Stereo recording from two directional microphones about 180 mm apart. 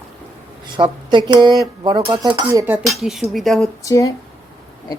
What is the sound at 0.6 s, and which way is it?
Speech, 25° right (ahead or behind).